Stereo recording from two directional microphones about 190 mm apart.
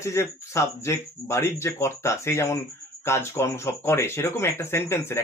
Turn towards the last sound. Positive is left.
turn(degrees=15)  # may be behind; listen again after turning